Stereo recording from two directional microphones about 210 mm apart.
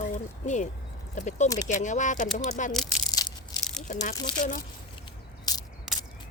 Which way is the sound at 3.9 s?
35° left (ahead or behind).